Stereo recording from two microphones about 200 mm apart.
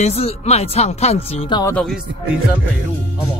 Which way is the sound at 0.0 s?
30° left (ahead or behind).